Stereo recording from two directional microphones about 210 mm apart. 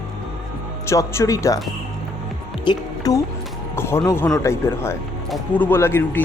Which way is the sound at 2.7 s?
15° left (ahead or behind).